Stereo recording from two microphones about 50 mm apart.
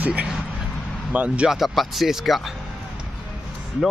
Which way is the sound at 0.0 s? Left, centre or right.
Right.